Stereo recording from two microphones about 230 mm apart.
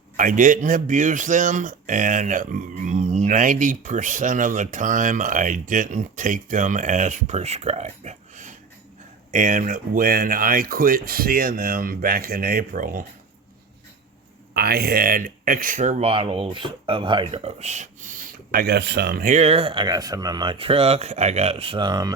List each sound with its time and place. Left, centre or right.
0.2 s speech: right
14.5 s speech: right; by 22.1 s centre